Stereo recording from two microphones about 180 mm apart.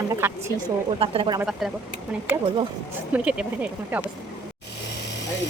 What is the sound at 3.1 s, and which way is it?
Speech, 5° right (ahead or behind).